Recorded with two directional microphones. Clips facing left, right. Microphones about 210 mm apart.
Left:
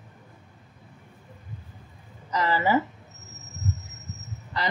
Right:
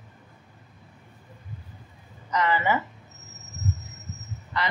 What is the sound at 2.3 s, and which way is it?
Speech, 35° left (ahead or behind).